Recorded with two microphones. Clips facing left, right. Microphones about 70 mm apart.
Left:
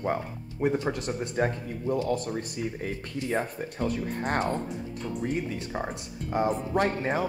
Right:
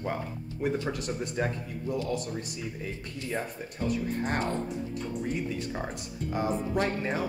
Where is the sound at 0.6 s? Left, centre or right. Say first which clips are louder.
Left 3 dB; left.